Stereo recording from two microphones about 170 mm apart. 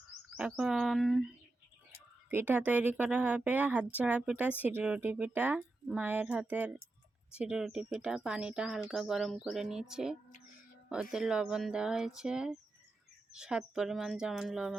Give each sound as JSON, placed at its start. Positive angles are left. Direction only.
{"t": 0.3, "sound": "speech", "side_deg": -5}
{"t": 2.3, "sound": "a woman's voice", "side_deg": -10}